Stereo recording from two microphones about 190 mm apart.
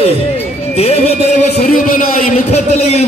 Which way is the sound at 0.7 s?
30° left (ahead or behind).